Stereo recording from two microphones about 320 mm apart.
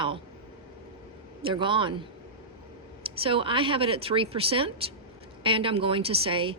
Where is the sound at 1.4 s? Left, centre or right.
Centre.